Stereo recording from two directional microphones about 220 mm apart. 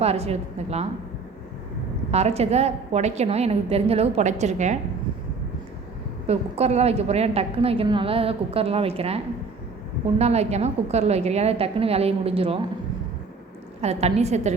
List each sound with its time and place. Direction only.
0.0 s a woman's voice: 30° right (ahead or behind)
2.0 s a woman's voice: 30° right (ahead or behind)
6.2 s a woman's voice: 30° right (ahead or behind)
13.8 s a woman's voice: 30° right (ahead or behind)